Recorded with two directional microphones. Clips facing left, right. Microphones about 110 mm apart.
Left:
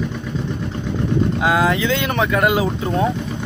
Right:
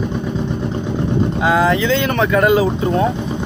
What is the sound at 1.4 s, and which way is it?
Speech, 5° left (ahead or behind).